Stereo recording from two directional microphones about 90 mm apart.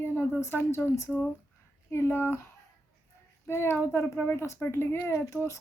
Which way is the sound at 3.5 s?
30° left (ahead or behind).